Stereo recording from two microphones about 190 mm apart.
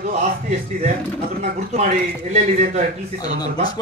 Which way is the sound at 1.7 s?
35° right (ahead or behind).